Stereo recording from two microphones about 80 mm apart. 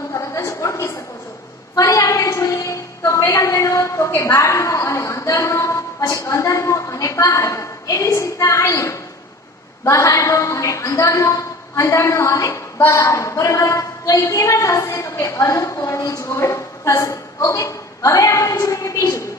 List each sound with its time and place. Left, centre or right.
0.1 s a sound: left
9.8 s a woman's voice: left
12.7 s a woman's voice: left